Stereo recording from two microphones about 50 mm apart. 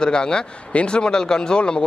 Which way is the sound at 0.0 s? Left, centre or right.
Centre.